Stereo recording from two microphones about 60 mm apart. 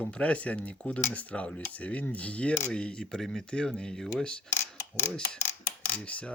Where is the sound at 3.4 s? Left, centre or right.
Centre.